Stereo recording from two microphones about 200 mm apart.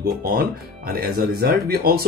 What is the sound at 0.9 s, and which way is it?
Speech, 50° right (ahead or behind).